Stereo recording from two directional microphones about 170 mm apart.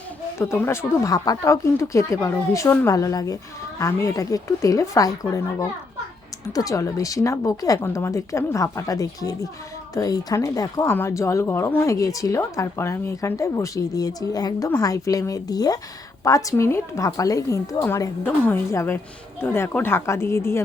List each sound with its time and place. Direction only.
0.3 s a woman's voice: 15° left (ahead or behind)